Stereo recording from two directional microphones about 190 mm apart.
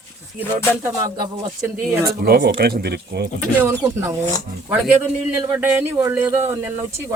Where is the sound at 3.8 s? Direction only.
15° right (ahead or behind).